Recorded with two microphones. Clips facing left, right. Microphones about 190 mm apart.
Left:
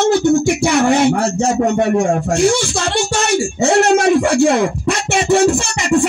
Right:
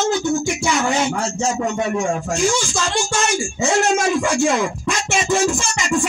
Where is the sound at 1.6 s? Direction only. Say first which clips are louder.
Left 8 dB; 60° left (ahead or behind).